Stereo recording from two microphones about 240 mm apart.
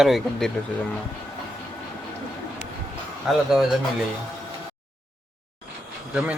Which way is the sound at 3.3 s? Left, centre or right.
Centre.